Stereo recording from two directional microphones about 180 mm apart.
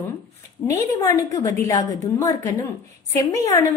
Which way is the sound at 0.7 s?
20° left (ahead or behind).